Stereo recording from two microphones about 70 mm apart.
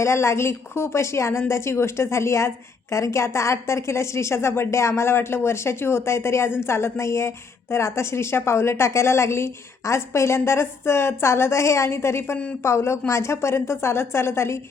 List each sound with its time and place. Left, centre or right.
0.0 s a woman's voice: left